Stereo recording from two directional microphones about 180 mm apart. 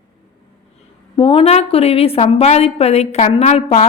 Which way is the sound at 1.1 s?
30° left (ahead or behind).